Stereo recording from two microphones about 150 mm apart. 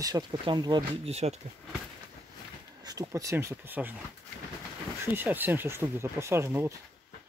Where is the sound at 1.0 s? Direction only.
45° right (ahead or behind).